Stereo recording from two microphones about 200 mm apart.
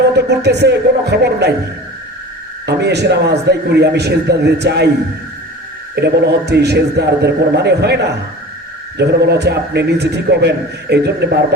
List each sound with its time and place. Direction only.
0.2 s a man's voice: 55° right (ahead or behind)
2.6 s a man's voice: 55° right (ahead or behind)
6.0 s a man's voice: 55° right (ahead or behind)
9.0 s a man's voice: 55° right (ahead or behind)